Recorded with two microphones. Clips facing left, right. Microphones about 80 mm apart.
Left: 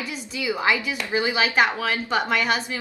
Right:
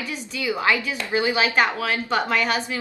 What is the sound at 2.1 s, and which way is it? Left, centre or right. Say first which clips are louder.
Speech: even; centre.